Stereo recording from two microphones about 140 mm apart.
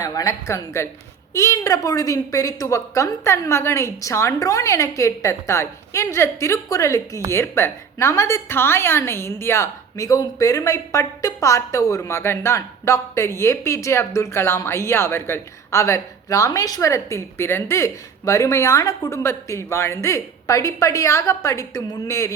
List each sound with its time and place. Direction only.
0.0 s a woman's voice: 25° left (ahead or behind)